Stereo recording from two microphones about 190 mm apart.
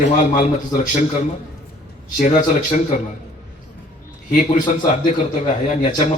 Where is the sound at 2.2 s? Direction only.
40° left (ahead or behind).